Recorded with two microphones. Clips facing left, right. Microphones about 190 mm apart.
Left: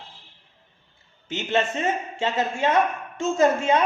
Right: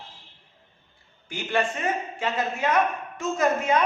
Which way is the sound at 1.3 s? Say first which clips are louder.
Left 2 dB; 20° left (ahead or behind).